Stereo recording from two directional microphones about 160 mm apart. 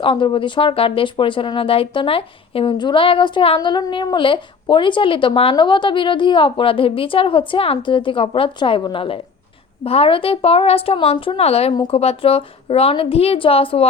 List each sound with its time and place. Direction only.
0.0 s speech: 30° left (ahead or behind)